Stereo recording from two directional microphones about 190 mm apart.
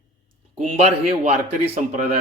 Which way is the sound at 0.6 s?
40° right (ahead or behind).